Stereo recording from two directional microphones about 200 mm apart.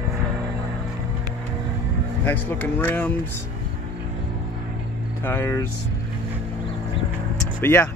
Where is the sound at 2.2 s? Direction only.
10° left (ahead or behind).